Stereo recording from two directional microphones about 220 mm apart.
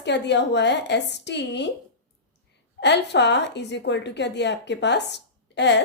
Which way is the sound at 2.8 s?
50° left (ahead or behind).